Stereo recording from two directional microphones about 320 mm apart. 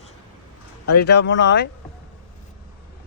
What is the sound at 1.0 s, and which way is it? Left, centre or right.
Speech, left.